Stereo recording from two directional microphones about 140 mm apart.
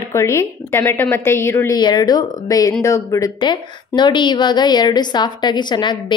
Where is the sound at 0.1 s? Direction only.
20° left (ahead or behind).